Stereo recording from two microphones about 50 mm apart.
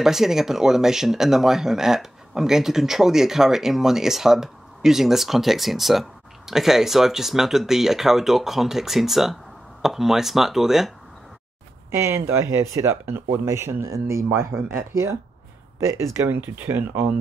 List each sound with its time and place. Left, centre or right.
0.0 s speech: centre
11.9 s speech: right
14.3 s speech: right
15.8 s speech: right
16.7 s speech: right